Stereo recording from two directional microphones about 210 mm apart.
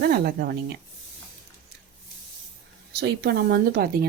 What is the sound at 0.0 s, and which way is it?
Speech, 50° right (ahead or behind).